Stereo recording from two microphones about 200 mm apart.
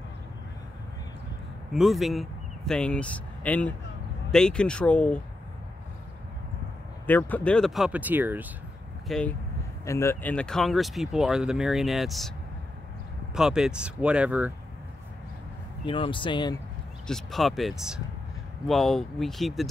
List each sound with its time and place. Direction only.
1.7 s speech: centre (ahead or behind)
7.1 s speech: 10° left (ahead or behind); by 8.5 s 10° right (ahead or behind)
9.0 s speech: centre (ahead or behind)
9.8 s speech: 15° left (ahead or behind)
13.3 s speech: 5° right (ahead or behind)
15.8 s speech: 25° left (ahead or behind)
17.1 s speech: centre (ahead or behind)